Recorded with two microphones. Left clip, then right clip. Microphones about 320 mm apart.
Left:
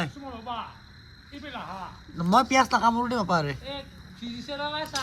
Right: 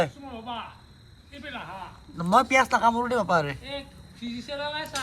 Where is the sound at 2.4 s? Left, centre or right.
Centre.